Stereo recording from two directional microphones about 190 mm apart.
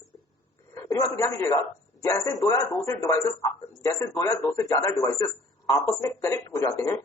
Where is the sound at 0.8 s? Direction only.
15° left (ahead or behind).